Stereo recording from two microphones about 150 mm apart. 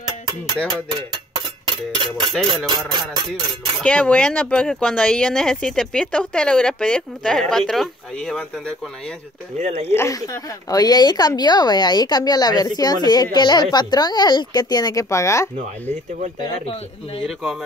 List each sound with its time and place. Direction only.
0.8 s cutlery: 35° right (ahead or behind)
2.4 s speech: 30° right (ahead or behind)
3.8 s speech: 10° left (ahead or behind)
9.6 s speech: 45° right (ahead or behind)
9.9 s a woman's voice: 20° left (ahead or behind)